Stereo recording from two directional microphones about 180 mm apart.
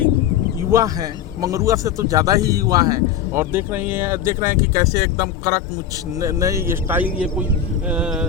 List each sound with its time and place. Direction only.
0.7 s speech: 20° right (ahead or behind)